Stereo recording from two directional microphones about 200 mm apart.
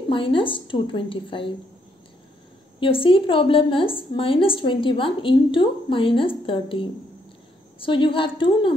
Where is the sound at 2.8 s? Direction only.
25° left (ahead or behind).